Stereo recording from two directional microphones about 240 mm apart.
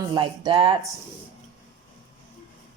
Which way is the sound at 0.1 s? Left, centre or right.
Centre.